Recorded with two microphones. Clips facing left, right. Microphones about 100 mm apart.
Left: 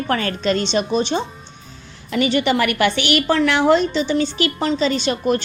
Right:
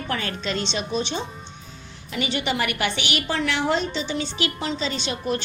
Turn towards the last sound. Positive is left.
turn(degrees=55)  # may be behind; listen again after turning